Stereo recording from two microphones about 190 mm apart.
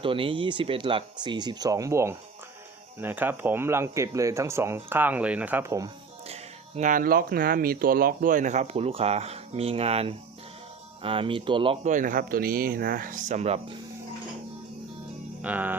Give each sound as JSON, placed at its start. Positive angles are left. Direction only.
{"t": 0.0, "sound": "speech", "side_deg": -25}
{"t": 6.2, "sound": "speech", "side_deg": -35}
{"t": 15.4, "sound": "music", "side_deg": -10}